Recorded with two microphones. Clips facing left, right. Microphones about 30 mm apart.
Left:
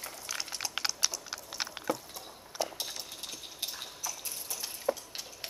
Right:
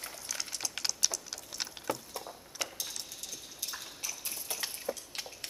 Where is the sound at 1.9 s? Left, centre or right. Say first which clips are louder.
Left 2 dB; centre.